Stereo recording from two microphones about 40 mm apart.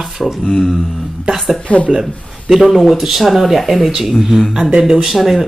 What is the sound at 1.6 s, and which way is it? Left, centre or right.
Speech, left.